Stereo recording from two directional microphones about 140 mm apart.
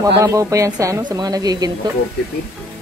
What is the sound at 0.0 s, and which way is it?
A woman's voice, 25° right (ahead or behind).